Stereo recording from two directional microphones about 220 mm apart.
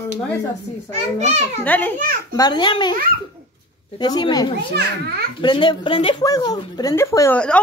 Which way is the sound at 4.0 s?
20° left (ahead or behind).